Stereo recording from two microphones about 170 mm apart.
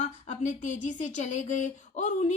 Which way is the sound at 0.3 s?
45° left (ahead or behind).